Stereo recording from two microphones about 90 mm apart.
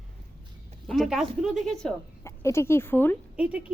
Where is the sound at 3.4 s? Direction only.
15° right (ahead or behind).